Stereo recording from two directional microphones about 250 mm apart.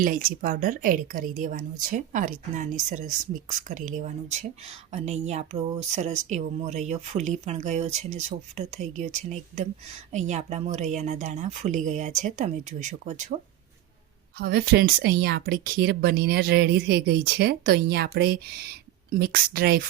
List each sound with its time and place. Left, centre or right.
0.0 s speech: right
14.3 s speech: right